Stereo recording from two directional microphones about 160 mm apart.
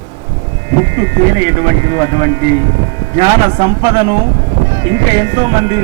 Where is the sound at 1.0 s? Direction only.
40° right (ahead or behind).